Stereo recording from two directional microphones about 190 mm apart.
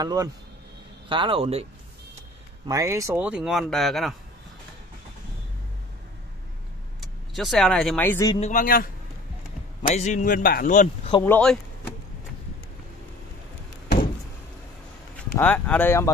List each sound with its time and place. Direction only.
0.0 s speech: 20° right (ahead or behind)
2.6 s speech: 15° right (ahead or behind); by 4.1 s centre (ahead or behind)
7.0 s speech: centre (ahead or behind)
8.4 s speech: 45° left (ahead or behind)
9.9 s speech: 40° left (ahead or behind)
11.2 s speech: 10° left (ahead or behind)
15.3 s speech: 10° left (ahead or behind)